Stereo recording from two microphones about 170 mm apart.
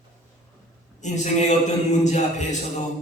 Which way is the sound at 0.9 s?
45° left (ahead or behind).